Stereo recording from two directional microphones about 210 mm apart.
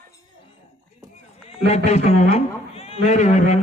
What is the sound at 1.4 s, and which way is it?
A man's voice, 30° left (ahead or behind).